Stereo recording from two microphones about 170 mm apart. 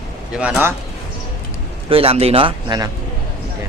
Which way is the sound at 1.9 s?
35° right (ahead or behind).